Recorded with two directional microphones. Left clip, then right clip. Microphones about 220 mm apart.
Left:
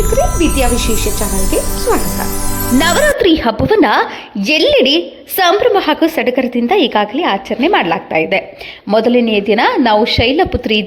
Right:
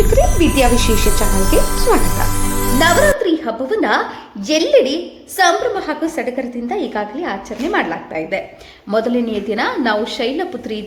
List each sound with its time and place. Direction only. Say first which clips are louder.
0.1 s speech: left 1 dB; centre (ahead or behind)
2.7 s a woman's voice: left 1 dB; 40° left (ahead or behind)